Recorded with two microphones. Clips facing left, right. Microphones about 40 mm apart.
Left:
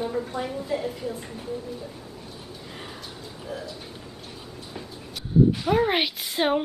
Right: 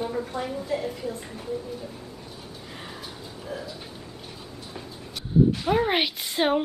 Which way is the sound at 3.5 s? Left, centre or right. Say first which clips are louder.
Even; centre.